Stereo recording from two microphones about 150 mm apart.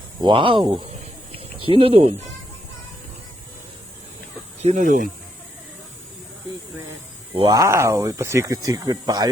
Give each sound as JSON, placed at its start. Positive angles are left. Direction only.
{"t": 0.2, "sound": "speech", "side_deg": -35}
{"t": 4.6, "sound": "speech", "side_deg": -55}
{"t": 7.3, "sound": "speech", "side_deg": -25}